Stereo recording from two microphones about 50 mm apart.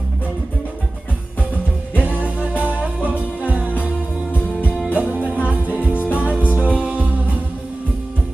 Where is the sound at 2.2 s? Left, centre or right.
Right.